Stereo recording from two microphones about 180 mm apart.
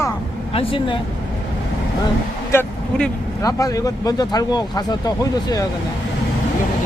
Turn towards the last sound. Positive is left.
turn(degrees=20)  # may be behind; listen again after turning